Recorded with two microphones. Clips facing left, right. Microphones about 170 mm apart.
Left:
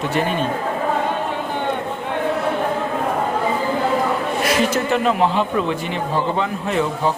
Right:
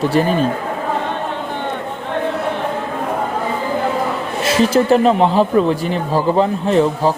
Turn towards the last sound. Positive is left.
turn(degrees=-35)  # may be behind; listen again after turning